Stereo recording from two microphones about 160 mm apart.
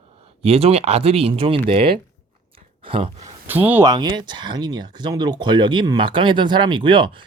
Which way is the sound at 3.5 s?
10° right (ahead or behind).